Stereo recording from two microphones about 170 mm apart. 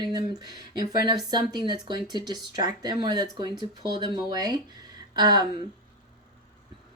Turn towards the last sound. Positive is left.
turn(degrees=-25)  # may be behind; listen again after turning